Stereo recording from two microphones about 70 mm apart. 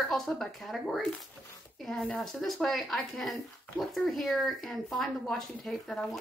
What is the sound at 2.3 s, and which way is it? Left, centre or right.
Speech, centre.